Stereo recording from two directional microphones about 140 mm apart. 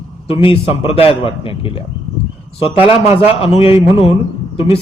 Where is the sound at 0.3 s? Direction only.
40° left (ahead or behind).